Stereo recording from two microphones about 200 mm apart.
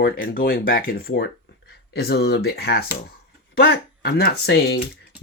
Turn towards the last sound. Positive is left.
turn(degrees=55)  # may be behind; listen again after turning